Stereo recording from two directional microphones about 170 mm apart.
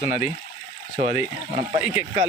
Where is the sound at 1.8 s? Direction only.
5° right (ahead or behind).